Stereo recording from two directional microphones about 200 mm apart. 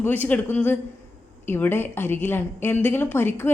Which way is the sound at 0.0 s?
10° left (ahead or behind).